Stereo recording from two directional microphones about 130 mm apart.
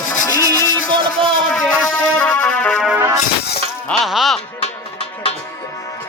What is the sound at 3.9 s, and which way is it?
Music, centre (ahead or behind).